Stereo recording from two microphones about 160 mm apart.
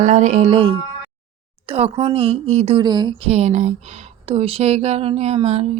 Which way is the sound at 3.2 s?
40° right (ahead or behind).